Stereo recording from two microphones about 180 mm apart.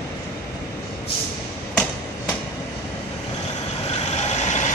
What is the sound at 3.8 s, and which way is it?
Vehicle, 35° left (ahead or behind).